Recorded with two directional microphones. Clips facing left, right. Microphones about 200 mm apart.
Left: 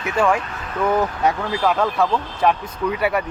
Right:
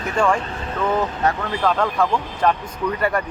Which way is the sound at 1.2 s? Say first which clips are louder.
Left 1 dB; 10° left (ahead or behind).